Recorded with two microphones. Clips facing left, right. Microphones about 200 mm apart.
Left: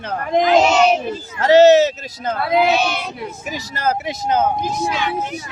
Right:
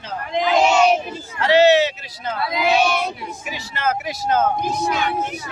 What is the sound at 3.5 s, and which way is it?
Speech, 40° left (ahead or behind).